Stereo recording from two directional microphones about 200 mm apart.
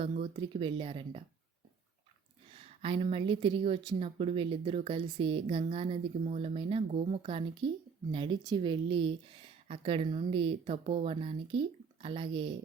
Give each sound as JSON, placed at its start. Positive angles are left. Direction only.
{"t": 0.0, "sound": "a woman's voice", "side_deg": -25}
{"t": 2.5, "sound": "a woman's voice", "side_deg": -30}